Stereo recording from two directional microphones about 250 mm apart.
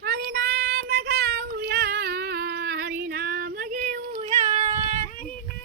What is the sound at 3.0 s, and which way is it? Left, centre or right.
Female singing, right.